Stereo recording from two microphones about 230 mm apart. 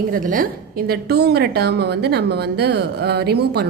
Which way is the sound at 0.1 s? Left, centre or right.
Right.